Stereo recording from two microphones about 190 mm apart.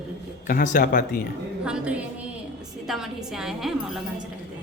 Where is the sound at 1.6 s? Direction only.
5° right (ahead or behind).